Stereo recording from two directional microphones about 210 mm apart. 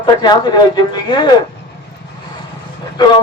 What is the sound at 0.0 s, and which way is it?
Speech, 20° left (ahead or behind).